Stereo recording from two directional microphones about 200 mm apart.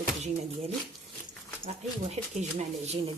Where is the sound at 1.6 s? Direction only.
35° right (ahead or behind).